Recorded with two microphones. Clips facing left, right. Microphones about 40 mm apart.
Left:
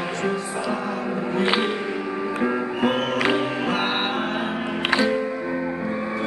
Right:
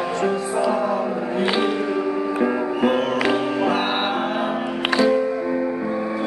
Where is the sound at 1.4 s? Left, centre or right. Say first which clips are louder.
Right 1 dB; centre.